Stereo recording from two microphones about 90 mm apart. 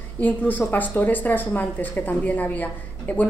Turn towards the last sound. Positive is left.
turn(degrees=20)  # may be behind; listen again after turning